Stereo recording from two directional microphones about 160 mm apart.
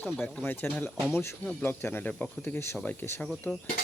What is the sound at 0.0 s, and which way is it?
Speech, 10° left (ahead or behind).